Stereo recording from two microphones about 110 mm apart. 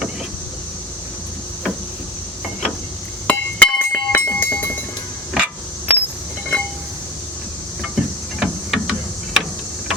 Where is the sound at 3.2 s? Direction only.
15° left (ahead or behind).